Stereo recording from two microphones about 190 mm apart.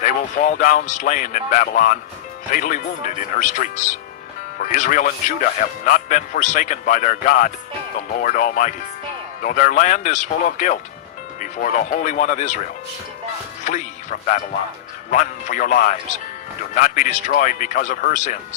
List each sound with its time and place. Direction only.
0.0 s speech: 45° left (ahead or behind)
13.7 s speech: 40° left (ahead or behind)